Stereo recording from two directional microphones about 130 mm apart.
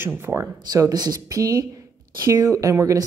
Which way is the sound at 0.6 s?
30° right (ahead or behind).